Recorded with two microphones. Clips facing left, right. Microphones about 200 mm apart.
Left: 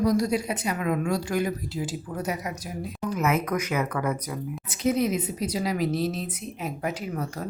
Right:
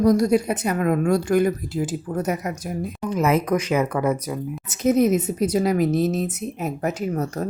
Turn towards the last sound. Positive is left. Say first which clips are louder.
# right 7 dB
turn(degrees=-45)  # may be behind; listen again after turning